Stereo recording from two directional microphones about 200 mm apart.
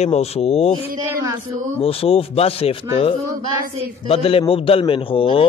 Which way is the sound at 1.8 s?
30° left (ahead or behind).